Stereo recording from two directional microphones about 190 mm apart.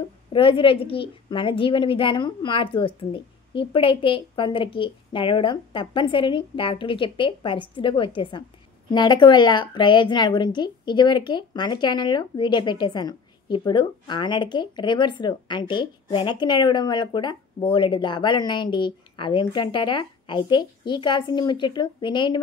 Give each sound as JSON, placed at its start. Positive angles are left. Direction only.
{"t": 0.3, "sound": "a woman's voice", "side_deg": 25}